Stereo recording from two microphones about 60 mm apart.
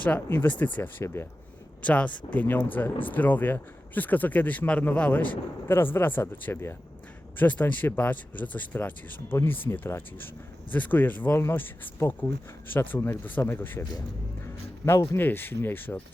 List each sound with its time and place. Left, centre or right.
0.3 s speech: left
1.0 s speech: left
1.8 s speech: left
5.6 s speech: left
7.3 s speech: left
9.4 s speech: left
13.5 s speech: left
14.4 s a sound: left
15.2 s speech: left